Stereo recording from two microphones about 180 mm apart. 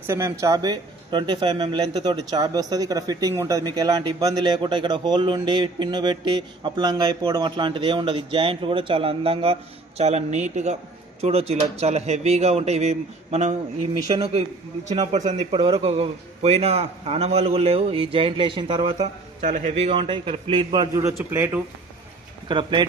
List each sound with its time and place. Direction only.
0.1 s a man's voice: 15° right (ahead or behind); by 13.6 s 35° right (ahead or behind)
14.8 s a man's voice: 40° right (ahead or behind)
19.4 s speech: 40° right (ahead or behind); by 21.6 s 10° right (ahead or behind)
22.4 s speech: 25° right (ahead or behind)